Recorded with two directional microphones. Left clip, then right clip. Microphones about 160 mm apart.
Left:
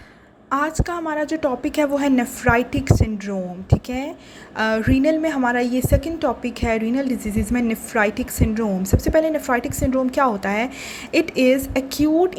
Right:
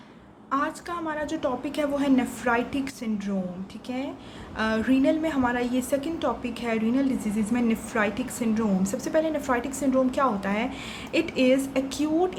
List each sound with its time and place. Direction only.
0.5 s a woman's voice: 40° left (ahead or behind)